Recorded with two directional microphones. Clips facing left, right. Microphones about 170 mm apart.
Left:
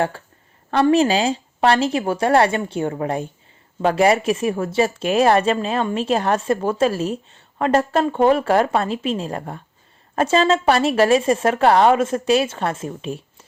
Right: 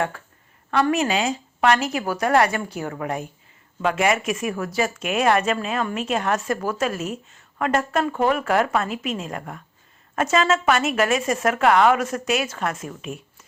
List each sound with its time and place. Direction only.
0.7 s a woman's voice: 30° left (ahead or behind)